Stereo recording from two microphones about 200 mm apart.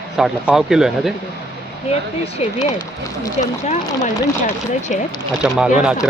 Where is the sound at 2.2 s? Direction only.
35° left (ahead or behind).